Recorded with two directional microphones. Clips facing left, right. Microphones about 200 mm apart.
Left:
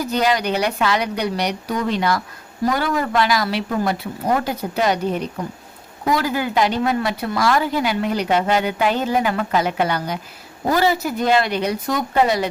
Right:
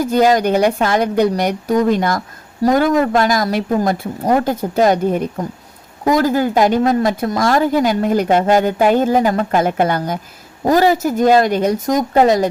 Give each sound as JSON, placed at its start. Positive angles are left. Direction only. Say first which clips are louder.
{"t": 0.0, "sound": "a woman's voice", "louder": "right 6 dB", "side_deg": -45}